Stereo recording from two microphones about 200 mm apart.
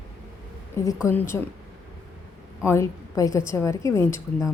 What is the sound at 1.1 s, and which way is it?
Speech, 10° left (ahead or behind).